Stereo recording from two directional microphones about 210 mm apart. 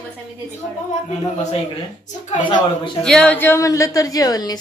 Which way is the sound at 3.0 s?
5° left (ahead or behind).